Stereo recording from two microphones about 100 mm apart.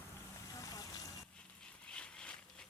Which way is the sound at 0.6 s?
40° left (ahead or behind).